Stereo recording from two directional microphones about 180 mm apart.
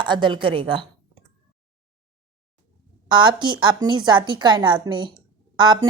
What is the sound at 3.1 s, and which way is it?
A woman's voice, 25° right (ahead or behind).